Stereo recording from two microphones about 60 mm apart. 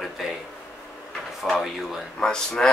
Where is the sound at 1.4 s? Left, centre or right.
Centre.